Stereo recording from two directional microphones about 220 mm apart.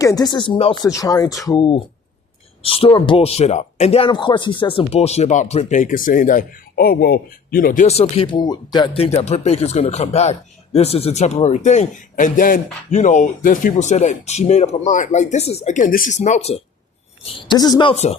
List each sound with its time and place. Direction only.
0.0 s speech: 15° left (ahead or behind)
17.2 s speech: 20° left (ahead or behind)